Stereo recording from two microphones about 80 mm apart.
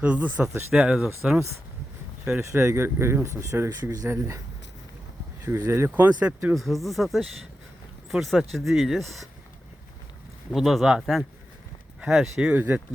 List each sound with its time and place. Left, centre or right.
0.0 s speech: centre
2.4 s speech: right
5.6 s speech: right
5.9 s speech: centre
6.5 s speech: centre
10.5 s speech: centre
12.5 s speech: right